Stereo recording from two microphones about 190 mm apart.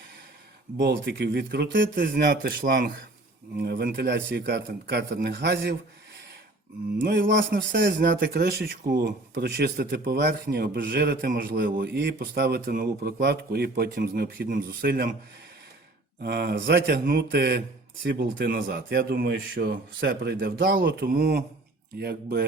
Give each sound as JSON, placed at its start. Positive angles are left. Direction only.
{"t": 0.8, "sound": "speech", "side_deg": -65}
{"t": 2.0, "sound": "speech", "side_deg": -55}
{"t": 7.1, "sound": "music", "side_deg": -70}
{"t": 7.8, "sound": "speech", "side_deg": -50}
{"t": 16.2, "sound": "speech", "side_deg": -60}